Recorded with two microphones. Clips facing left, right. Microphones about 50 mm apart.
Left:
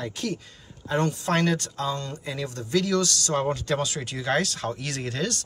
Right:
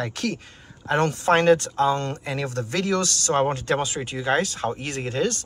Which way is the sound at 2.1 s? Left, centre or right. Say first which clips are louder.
Right 4 dB; right.